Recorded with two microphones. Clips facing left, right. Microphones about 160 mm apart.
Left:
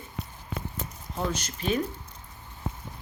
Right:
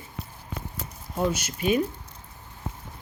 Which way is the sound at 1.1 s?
5° right (ahead or behind).